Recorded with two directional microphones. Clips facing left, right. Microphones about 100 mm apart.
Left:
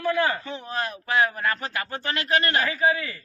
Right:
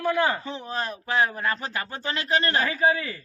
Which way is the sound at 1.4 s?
20° right (ahead or behind).